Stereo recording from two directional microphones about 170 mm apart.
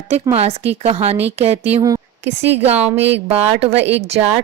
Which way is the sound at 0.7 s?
40° right (ahead or behind).